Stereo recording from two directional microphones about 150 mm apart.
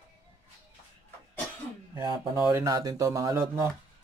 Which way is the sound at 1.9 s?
25° right (ahead or behind).